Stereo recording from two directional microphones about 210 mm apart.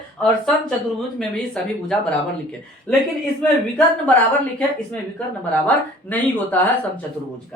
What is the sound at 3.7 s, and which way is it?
Speech, 10° left (ahead or behind).